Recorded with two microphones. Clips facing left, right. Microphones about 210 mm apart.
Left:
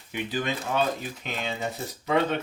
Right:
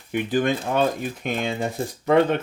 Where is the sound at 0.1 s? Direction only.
50° right (ahead or behind).